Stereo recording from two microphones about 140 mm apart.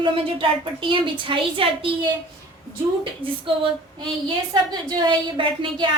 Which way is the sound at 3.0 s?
40° right (ahead or behind).